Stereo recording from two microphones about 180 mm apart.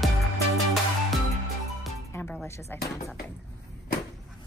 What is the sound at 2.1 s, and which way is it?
Music, 5° left (ahead or behind).